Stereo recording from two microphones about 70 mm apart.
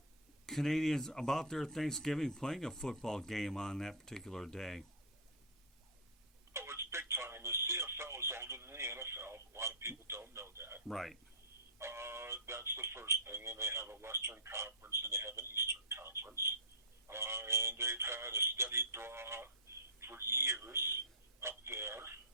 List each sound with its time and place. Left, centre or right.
0.4 s speech: centre
6.5 s telephone: right
10.8 s speech: centre
11.8 s a sound: right
16.3 s telephone: right
17.1 s speech: right